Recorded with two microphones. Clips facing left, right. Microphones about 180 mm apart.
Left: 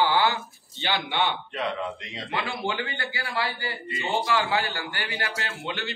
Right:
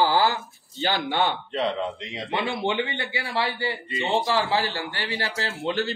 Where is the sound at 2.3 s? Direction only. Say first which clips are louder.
Right 4 dB; 25° right (ahead or behind).